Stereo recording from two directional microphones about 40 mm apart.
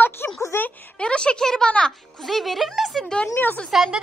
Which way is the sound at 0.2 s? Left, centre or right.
Left.